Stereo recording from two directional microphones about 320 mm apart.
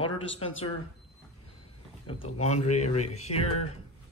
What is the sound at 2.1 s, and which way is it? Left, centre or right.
Speech, centre.